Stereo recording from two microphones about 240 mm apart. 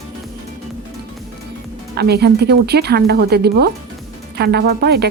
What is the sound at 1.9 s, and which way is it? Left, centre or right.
A woman's voice, right.